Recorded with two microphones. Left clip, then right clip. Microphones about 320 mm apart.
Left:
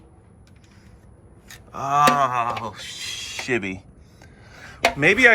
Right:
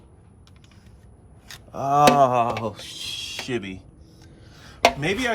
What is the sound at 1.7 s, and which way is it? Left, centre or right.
Speech, centre.